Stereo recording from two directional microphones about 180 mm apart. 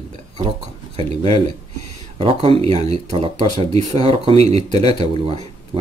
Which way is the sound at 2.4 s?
35° right (ahead or behind).